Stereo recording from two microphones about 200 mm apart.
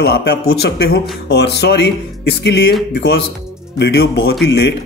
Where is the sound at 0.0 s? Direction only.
55° left (ahead or behind).